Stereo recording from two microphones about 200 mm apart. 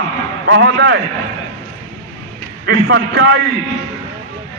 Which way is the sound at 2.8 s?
55° right (ahead or behind).